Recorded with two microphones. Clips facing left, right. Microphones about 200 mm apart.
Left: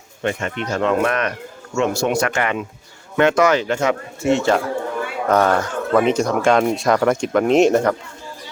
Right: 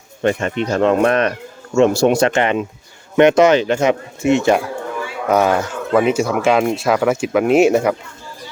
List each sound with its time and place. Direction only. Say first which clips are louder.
0.2 s speech: right 5 dB; 35° right (ahead or behind); by 7.9 s 5° right (ahead or behind)